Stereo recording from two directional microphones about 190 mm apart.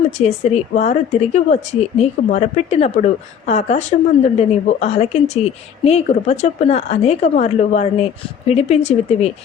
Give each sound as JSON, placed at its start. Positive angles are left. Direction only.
{"t": 0.7, "sound": "speech", "side_deg": 40}